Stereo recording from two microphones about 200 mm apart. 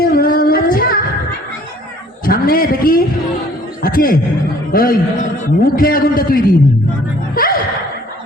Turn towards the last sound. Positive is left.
turn(degrees=45)  # may be behind; listen again after turning